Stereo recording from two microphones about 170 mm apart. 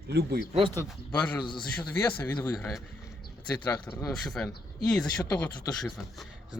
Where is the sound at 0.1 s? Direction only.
70° right (ahead or behind).